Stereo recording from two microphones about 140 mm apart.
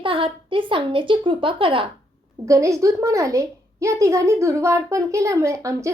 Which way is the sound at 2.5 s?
20° right (ahead or behind).